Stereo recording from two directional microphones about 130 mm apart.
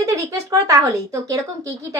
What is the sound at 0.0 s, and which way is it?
Speech, 25° right (ahead or behind).